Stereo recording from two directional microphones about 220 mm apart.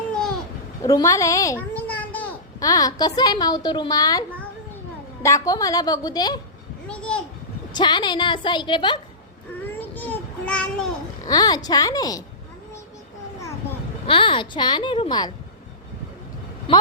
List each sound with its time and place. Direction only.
0.1 s babbling: 5° left (ahead or behind)
0.8 s a child's voice: 15° left (ahead or behind)
5.2 s a woman's voice: 15° left (ahead or behind)
6.8 s a sound: 5° left (ahead or behind)
7.7 s a woman's voice: 20° left (ahead or behind)
9.9 s a sound: 5° left (ahead or behind)
11.3 s a woman's voice: 15° left (ahead or behind)
14.1 s a woman's voice: 20° left (ahead or behind)
16.7 s a woman's voice: 25° left (ahead or behind)